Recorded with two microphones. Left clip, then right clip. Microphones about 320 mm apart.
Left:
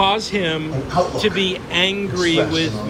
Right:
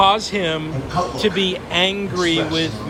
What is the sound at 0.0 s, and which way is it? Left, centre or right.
Speech, centre.